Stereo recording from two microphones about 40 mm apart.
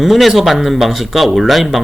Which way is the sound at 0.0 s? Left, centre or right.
Centre.